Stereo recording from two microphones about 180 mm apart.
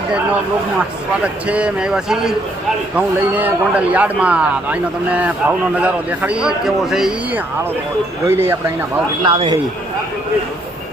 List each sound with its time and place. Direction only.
1.2 s a man's voice: 5° right (ahead or behind)
9.2 s a man's voice: 30° right (ahead or behind)